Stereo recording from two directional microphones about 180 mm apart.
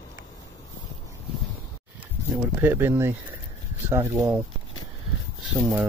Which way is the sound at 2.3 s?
15° right (ahead or behind).